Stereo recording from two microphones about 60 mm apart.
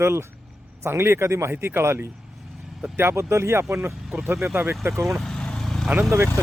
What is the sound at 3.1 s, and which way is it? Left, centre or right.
Speech, right.